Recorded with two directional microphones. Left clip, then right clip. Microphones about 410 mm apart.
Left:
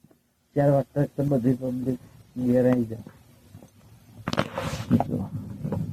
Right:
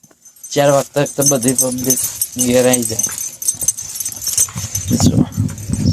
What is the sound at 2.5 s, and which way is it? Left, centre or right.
Speech, right.